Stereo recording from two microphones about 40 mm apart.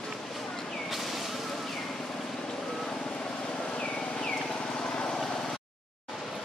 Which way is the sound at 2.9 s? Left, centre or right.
Left.